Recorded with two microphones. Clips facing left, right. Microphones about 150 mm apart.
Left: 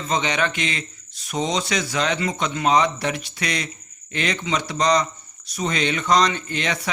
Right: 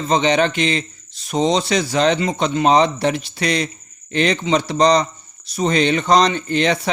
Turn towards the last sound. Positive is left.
turn(degrees=-30)  # may be behind; listen again after turning